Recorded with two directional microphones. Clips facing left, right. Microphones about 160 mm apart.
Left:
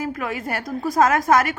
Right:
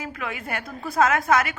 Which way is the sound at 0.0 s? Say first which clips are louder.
Left 6 dB; 45° left (ahead or behind).